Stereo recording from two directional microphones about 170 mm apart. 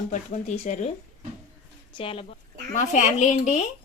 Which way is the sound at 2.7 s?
45° left (ahead or behind).